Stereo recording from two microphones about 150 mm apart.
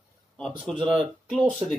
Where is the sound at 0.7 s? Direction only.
35° right (ahead or behind).